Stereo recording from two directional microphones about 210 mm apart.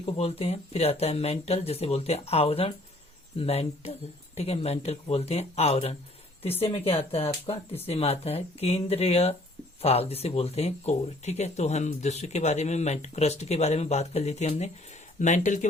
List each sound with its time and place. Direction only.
0.0 s speech: 25° left (ahead or behind)